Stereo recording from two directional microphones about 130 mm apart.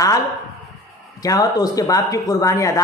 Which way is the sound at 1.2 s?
30° left (ahead or behind).